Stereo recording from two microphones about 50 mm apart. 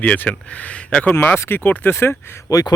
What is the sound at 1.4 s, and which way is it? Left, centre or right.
Speech, left.